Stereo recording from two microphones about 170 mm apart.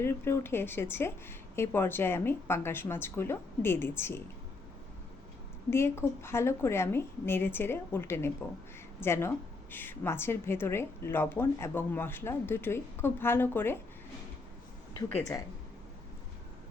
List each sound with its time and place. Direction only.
0.0 s a woman's voice: 15° left (ahead or behind)
5.7 s a woman's voice: 15° left (ahead or behind)
14.9 s speech: 20° left (ahead or behind)